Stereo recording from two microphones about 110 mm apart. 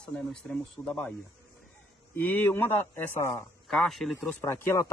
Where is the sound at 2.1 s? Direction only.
15° left (ahead or behind).